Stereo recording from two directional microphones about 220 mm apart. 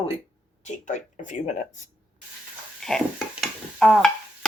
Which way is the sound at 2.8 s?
Centre (ahead or behind).